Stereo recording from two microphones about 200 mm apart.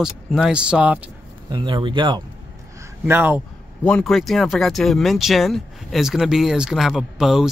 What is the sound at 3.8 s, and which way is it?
Speech, 5° left (ahead or behind).